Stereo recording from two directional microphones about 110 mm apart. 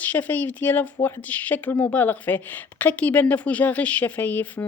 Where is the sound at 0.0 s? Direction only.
15° left (ahead or behind).